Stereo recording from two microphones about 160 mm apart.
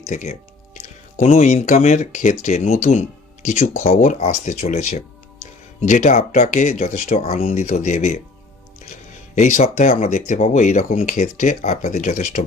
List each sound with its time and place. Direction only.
0.1 s speech: 50° left (ahead or behind)
3.9 s speech: 55° left (ahead or behind)
9.3 s speech: 50° left (ahead or behind)